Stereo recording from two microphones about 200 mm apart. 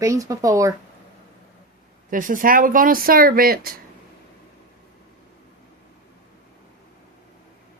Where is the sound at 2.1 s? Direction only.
40° right (ahead or behind).